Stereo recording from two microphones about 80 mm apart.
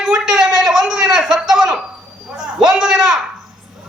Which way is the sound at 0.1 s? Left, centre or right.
Centre.